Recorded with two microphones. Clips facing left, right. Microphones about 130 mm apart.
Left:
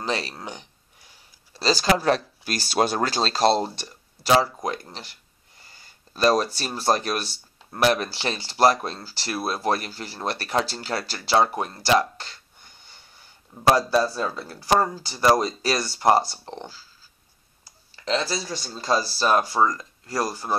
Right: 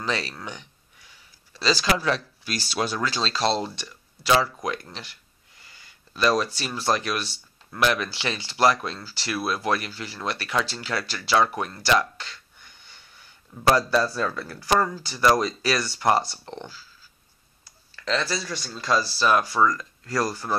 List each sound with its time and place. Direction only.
0.0 s speech: 35° left (ahead or behind)
12.2 s wheeze: 35° left (ahead or behind)
13.6 s speech: 25° left (ahead or behind)
17.9 s speech: 25° left (ahead or behind)